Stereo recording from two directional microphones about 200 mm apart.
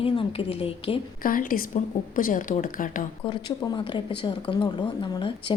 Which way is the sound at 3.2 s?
25° left (ahead or behind).